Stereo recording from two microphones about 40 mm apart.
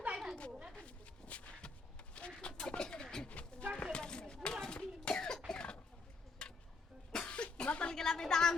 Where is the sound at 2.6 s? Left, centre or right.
Centre.